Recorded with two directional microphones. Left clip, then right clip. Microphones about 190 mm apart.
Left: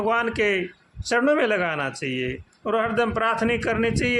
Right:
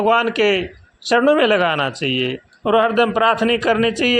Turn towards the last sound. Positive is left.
turn(degrees=-20)  # may be behind; listen again after turning